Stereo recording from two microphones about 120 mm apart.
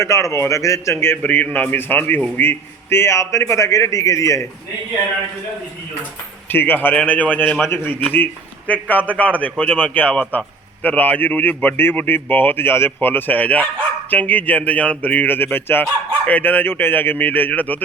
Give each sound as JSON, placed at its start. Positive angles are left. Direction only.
{"t": 0.0, "sound": "a man's voice", "side_deg": 25}
{"t": 6.5, "sound": "speech", "side_deg": 15}